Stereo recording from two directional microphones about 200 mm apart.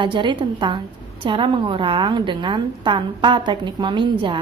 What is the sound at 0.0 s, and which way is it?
A woman's voice, 25° right (ahead or behind).